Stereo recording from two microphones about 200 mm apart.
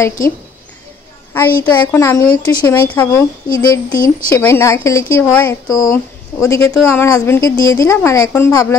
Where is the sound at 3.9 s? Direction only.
45° left (ahead or behind).